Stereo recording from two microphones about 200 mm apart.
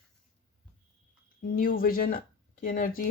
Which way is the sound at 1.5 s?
45° left (ahead or behind).